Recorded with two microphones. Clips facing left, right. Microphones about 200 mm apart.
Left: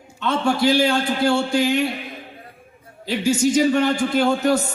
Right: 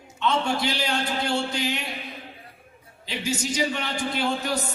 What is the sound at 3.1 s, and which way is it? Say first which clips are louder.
A man's voice: left 10 dB; 50° left (ahead or behind).